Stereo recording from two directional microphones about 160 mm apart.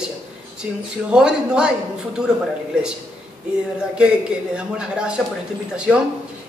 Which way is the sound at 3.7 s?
5° right (ahead or behind).